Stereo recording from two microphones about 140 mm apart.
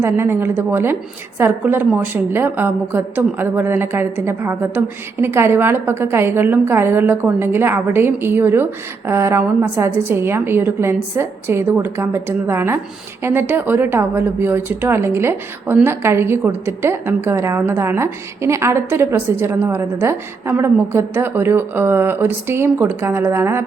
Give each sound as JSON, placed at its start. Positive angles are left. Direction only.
{"t": 0.0, "sound": "a woman's voice", "side_deg": -15}